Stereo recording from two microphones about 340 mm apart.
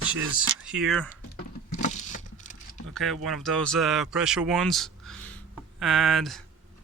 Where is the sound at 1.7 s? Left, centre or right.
Left.